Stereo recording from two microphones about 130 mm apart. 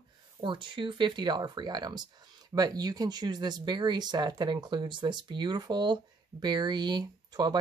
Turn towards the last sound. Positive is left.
turn(degrees=-35)  # may be behind; listen again after turning